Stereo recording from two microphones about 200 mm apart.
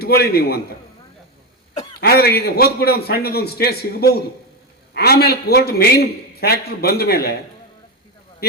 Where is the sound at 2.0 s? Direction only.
50° left (ahead or behind).